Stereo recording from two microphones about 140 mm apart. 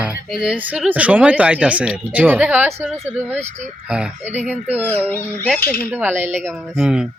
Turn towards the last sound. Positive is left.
turn(degrees=-5)  # may be behind; listen again after turning